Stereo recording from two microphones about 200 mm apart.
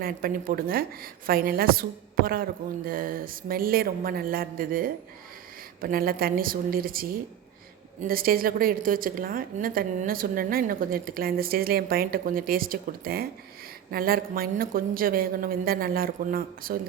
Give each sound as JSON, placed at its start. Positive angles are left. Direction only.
{"t": 0.0, "sound": "a woman's voice", "side_deg": -45}